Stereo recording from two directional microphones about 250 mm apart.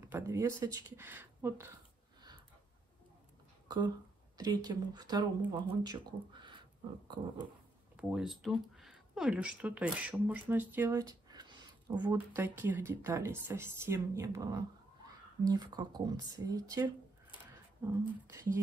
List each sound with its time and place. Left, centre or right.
0.1 s speech: centre
3.6 s speech: centre
7.9 s speech: centre